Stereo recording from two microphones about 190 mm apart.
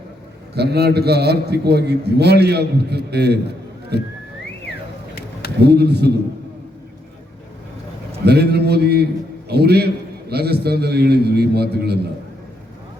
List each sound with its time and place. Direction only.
0.5 s a man's voice: 60° right (ahead or behind)
5.5 s a man's voice: 60° right (ahead or behind)
8.2 s a man's voice: 60° right (ahead or behind)